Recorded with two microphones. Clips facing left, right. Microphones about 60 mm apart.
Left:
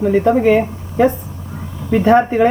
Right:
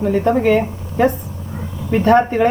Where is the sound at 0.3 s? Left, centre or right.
Left.